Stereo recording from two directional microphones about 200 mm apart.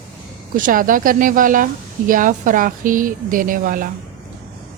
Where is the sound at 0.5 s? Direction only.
45° right (ahead or behind).